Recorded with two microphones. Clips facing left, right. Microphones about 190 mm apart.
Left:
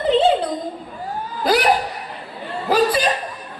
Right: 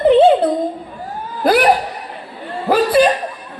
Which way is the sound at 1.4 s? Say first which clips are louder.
Right 4 dB; 55° right (ahead or behind).